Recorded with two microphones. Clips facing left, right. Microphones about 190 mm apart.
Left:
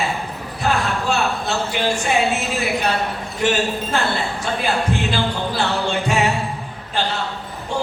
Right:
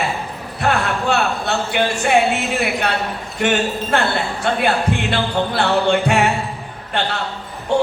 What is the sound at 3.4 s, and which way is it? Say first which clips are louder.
Speech: right 1 dB; 65° right (ahead or behind).